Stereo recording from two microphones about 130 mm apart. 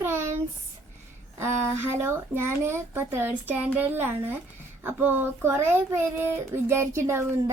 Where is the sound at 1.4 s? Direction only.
20° right (ahead or behind).